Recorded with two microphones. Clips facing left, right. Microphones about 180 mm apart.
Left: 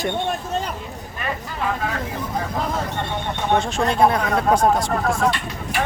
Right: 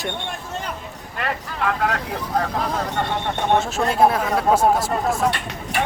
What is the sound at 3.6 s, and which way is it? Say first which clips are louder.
Speech: even; 5° right (ahead or behind).